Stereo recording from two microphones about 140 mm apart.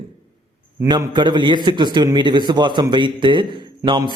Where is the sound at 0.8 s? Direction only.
30° right (ahead or behind).